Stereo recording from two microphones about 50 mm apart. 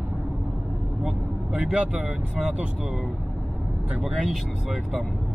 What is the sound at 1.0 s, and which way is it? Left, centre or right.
Speech, centre.